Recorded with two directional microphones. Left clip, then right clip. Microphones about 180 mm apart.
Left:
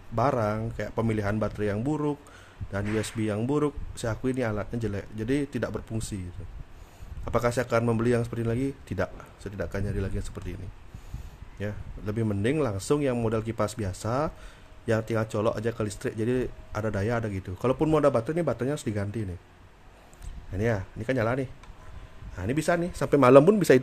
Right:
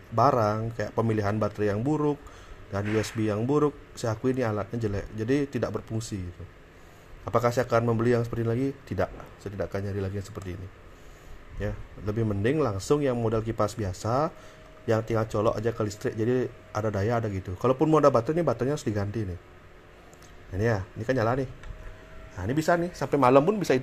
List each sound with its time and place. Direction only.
0.1 s speech: 15° left (ahead or behind)
7.2 s speech: 20° left (ahead or behind)
11.6 s speech: 20° left (ahead or behind)
20.5 s speech: 15° left (ahead or behind)
22.9 s a man's voice: 65° left (ahead or behind); by 23.8 s 80° left